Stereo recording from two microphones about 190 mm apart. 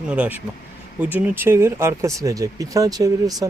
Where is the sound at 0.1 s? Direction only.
10° right (ahead or behind).